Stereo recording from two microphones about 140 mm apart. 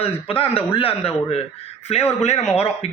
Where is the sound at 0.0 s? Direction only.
40° left (ahead or behind).